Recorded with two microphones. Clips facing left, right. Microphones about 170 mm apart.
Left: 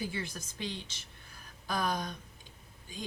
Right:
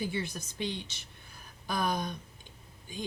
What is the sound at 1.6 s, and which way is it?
Speech, 15° right (ahead or behind).